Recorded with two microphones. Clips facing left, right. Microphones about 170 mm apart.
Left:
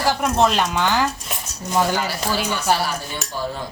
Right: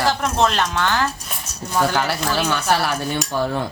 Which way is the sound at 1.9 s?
65° right (ahead or behind).